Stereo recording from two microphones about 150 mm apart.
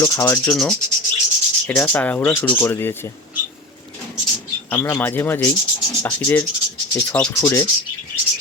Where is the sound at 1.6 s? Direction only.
10° left (ahead or behind).